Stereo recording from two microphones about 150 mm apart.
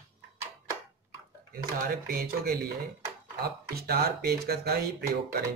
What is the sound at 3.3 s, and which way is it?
Speech, 90° right.